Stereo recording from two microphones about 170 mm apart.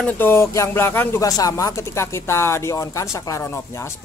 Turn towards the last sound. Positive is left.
turn(degrees=15)  # may be behind; listen again after turning